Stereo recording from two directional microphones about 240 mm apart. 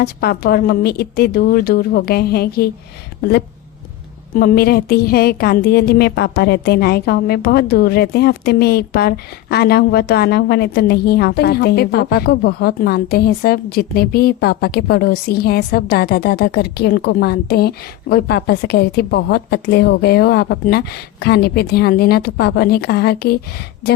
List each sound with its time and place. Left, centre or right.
0.0 s a woman's voice: left
4.4 s a woman's voice: left